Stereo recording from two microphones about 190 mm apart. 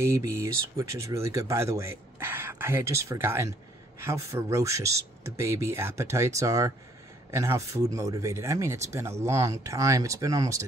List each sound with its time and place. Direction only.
0.0 s speech: 15° right (ahead or behind)